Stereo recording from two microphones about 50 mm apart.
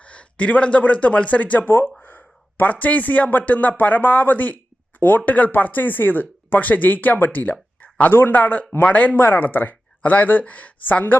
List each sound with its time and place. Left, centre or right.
0.0 s a man's voice: left
1.6 s a man's voice: left
7.3 s a sound: left
8.1 s speech: left
9.2 s speech: left